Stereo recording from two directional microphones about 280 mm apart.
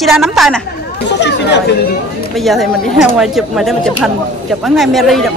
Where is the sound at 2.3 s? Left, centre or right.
Centre.